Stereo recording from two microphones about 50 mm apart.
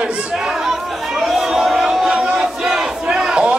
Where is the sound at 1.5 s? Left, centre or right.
Centre.